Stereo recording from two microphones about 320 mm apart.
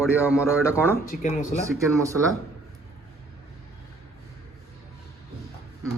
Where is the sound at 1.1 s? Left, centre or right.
Left.